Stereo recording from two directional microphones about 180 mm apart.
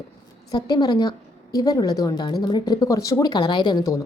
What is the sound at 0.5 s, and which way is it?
A woman's voice, 20° left (ahead or behind).